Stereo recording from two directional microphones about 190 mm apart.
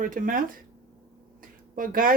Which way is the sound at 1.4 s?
45° right (ahead or behind).